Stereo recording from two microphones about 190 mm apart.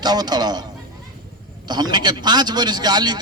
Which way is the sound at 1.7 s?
20° right (ahead or behind).